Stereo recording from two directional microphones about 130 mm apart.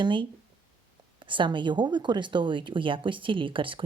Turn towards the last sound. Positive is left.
turn(degrees=-40)  # may be behind; listen again after turning